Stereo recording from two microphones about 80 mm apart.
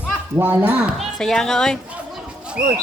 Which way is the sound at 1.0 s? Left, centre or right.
Centre.